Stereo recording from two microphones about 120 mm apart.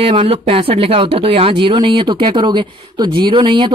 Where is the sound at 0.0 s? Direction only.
50° right (ahead or behind).